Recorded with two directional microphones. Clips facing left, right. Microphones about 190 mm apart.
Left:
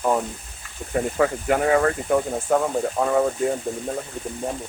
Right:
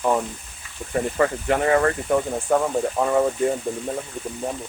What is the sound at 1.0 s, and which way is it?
Speech, centre (ahead or behind).